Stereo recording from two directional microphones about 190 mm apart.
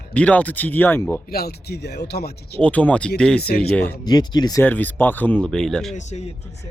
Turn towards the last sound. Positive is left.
turn(degrees=35)  # may be behind; listen again after turning